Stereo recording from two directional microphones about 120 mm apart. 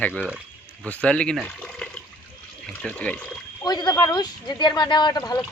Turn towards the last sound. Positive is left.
turn(degrees=35)  # may be behind; listen again after turning